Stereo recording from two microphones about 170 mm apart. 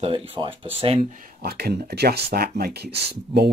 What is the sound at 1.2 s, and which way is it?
Speech, 65° right (ahead or behind).